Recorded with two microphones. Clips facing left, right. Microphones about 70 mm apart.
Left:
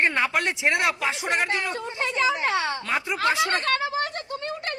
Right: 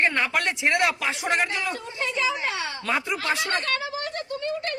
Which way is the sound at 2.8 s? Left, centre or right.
Centre.